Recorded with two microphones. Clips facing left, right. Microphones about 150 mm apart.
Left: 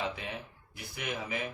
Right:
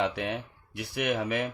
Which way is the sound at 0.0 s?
65° right (ahead or behind).